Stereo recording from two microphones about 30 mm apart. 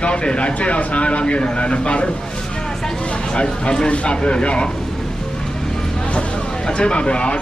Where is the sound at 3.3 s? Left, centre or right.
Left.